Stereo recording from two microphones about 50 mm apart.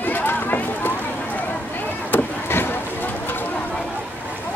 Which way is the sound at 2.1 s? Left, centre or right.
Left.